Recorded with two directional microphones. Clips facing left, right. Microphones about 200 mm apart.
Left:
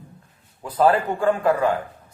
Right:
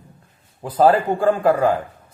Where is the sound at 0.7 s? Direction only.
30° right (ahead or behind).